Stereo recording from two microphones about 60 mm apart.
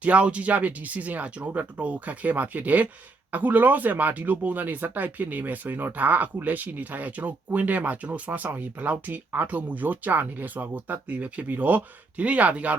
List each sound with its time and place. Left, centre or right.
0.0 s speech: right